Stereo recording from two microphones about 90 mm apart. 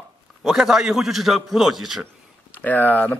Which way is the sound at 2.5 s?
20° left (ahead or behind).